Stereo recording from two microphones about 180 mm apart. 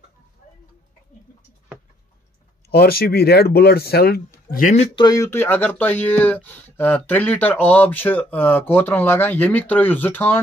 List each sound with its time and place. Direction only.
2.7 s speech: 60° left (ahead or behind)
4.5 s speech: 45° left (ahead or behind)
4.9 s speech: 20° left (ahead or behind)